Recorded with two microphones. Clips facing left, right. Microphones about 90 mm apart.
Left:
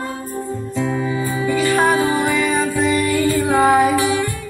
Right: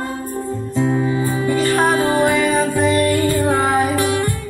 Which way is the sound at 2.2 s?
55° right (ahead or behind).